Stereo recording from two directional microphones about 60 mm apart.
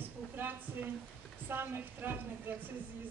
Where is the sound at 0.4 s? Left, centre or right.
Right.